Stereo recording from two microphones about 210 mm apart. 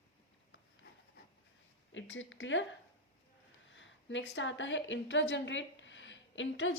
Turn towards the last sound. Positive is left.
turn(degrees=65)  # may be behind; listen again after turning